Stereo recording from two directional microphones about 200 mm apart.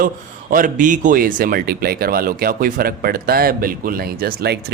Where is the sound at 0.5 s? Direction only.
40° right (ahead or behind).